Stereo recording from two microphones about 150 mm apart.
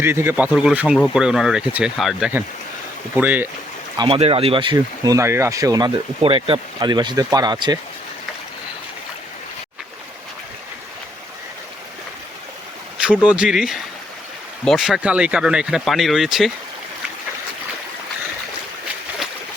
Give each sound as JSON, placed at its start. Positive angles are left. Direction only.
{"t": 0.0, "sound": "speech", "side_deg": -15}
{"t": 3.9, "sound": "speech", "side_deg": -30}
{"t": 6.2, "sound": "speech", "side_deg": -40}
{"t": 13.2, "sound": "speech", "side_deg": -5}